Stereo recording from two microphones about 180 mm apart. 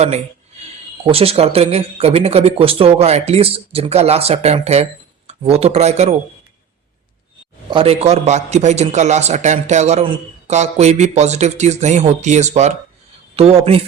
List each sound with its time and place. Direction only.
1.0 s a man's voice: 35° right (ahead or behind)
7.7 s a man's voice: 30° right (ahead or behind)